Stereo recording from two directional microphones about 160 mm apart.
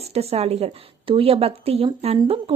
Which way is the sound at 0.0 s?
40° right (ahead or behind).